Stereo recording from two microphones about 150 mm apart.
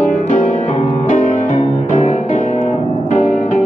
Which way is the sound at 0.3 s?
55° left (ahead or behind).